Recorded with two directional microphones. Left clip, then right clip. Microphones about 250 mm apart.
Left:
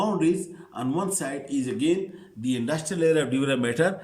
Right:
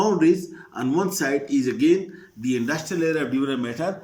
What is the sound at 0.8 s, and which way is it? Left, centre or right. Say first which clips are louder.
Speech: right 5 dB; centre.